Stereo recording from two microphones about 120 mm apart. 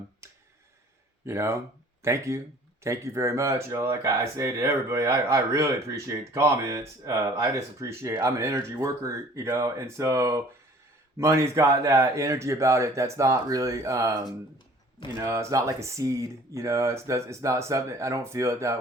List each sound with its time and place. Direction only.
1.2 s speech: 25° right (ahead or behind)